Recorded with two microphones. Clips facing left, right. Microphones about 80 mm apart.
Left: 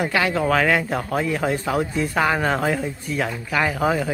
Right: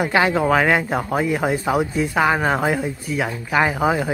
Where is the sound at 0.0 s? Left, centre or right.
Right.